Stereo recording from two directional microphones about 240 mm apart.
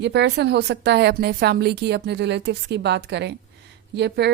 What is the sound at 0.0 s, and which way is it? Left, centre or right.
A woman's voice, right.